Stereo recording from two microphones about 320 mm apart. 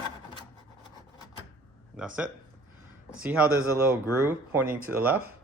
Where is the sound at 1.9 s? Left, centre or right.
Centre.